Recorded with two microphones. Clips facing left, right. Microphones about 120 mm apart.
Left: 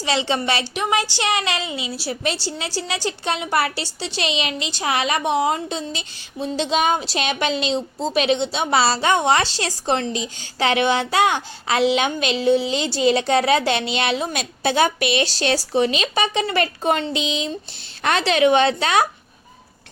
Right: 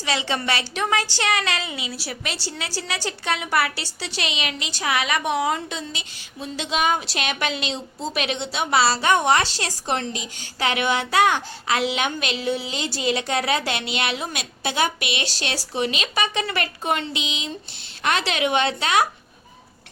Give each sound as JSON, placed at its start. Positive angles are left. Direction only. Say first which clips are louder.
{"t": 0.0, "sound": "a woman's voice", "louder": "left 4 dB", "side_deg": 25}